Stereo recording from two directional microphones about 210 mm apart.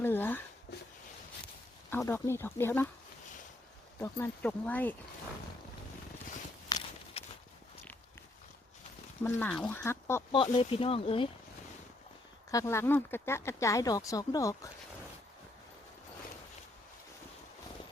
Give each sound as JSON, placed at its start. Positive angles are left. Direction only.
{"t": 0.0, "sound": "speech", "side_deg": 10}
{"t": 1.9, "sound": "speech", "side_deg": 10}
{"t": 4.0, "sound": "speech", "side_deg": 10}
{"t": 6.7, "sound": "walk", "side_deg": 20}
{"t": 9.2, "sound": "speech", "side_deg": 5}
{"t": 10.3, "sound": "speech", "side_deg": 25}
{"t": 12.5, "sound": "speech", "side_deg": 15}